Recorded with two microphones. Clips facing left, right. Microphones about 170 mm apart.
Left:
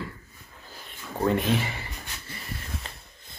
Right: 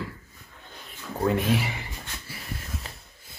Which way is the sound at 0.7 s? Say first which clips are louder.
Even; centre (ahead or behind).